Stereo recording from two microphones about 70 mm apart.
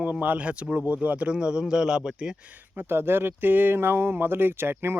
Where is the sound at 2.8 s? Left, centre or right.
Right.